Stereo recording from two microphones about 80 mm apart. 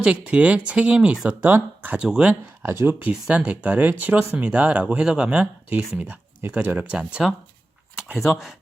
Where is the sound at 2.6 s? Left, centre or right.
Right.